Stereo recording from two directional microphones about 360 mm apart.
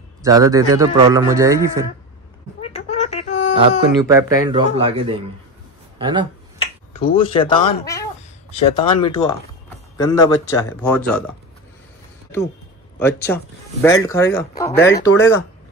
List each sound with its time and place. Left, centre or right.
0.2 s a man's voice: centre
2.6 s a sound: centre
4.0 s a man's voice: centre
6.9 s speech: centre
13.0 s speech: centre